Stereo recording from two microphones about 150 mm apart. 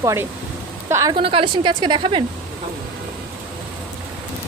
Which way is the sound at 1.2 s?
35° right (ahead or behind).